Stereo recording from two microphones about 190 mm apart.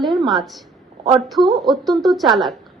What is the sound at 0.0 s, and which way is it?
A woman's voice, centre (ahead or behind).